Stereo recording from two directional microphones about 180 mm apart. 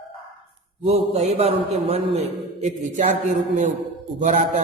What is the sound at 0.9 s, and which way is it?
A man's voice, 40° right (ahead or behind).